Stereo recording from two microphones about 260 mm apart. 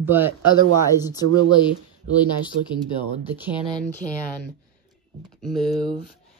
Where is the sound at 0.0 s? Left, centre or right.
Centre.